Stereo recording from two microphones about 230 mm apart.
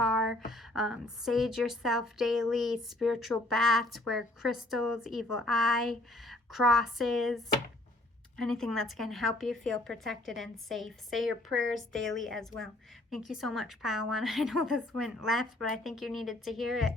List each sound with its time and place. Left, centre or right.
0.0 s a woman's voice: centre
11.6 s a woman's voice: right
12.1 s a woman's voice: centre